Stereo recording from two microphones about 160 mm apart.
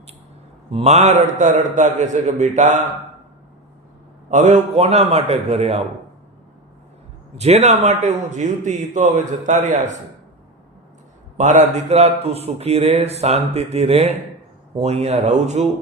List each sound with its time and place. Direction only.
0.7 s a man's voice: 40° right (ahead or behind)
4.3 s speech: 45° right (ahead or behind)
7.3 s a man's voice: 45° right (ahead or behind)
11.3 s a man's voice: 50° right (ahead or behind)